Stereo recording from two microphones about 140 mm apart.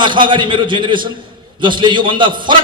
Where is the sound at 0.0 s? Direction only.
35° right (ahead or behind).